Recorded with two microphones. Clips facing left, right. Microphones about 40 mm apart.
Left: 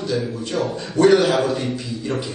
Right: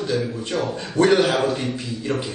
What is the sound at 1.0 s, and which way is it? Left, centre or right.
Speech, right.